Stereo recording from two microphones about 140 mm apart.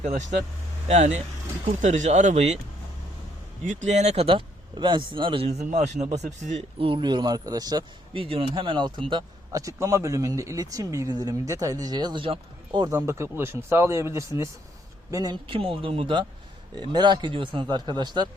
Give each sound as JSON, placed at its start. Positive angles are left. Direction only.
{"t": 0.0, "sound": "speech", "side_deg": -60}
{"t": 3.7, "sound": "speech", "side_deg": -60}
{"t": 6.7, "sound": "speech", "side_deg": -40}
{"t": 9.5, "sound": "speech", "side_deg": -25}
{"t": 13.1, "sound": "speech", "side_deg": -20}